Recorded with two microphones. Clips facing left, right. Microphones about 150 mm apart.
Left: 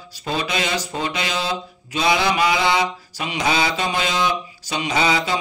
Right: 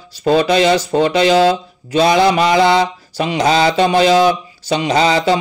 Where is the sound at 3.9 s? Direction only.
40° right (ahead or behind).